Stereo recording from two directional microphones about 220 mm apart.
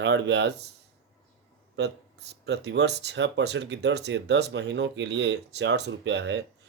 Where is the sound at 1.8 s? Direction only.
50° right (ahead or behind).